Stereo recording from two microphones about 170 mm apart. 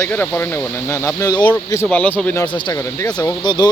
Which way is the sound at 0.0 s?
10° left (ahead or behind).